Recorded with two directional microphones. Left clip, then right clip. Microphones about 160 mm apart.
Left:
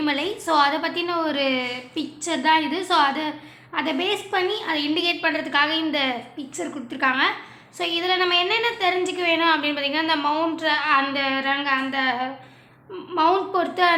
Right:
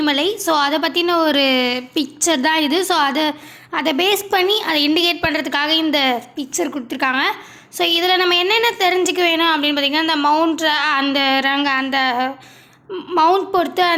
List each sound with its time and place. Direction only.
0.0 s a woman's voice: 40° right (ahead or behind)